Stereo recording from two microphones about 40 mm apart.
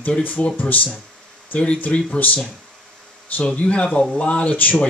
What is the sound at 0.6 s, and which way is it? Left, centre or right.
Speech, left.